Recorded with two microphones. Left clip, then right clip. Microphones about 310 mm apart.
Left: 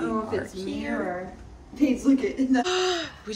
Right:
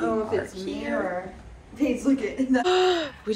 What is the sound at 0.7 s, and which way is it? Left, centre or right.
Speech, centre.